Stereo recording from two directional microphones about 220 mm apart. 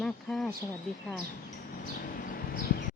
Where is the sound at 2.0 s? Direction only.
40° left (ahead or behind).